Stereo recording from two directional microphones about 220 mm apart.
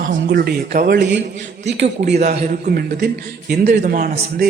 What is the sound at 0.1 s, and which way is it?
Speech, 40° right (ahead or behind).